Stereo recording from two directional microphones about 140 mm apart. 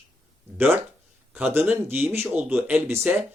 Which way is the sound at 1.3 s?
10° right (ahead or behind).